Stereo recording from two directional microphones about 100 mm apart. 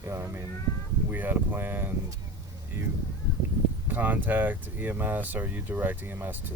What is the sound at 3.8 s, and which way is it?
Speech, 20° right (ahead or behind).